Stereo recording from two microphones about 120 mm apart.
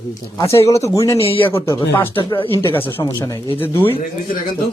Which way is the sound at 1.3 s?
45° left (ahead or behind).